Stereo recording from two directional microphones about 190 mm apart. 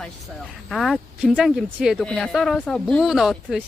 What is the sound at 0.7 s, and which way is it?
A woman's voice, centre (ahead or behind).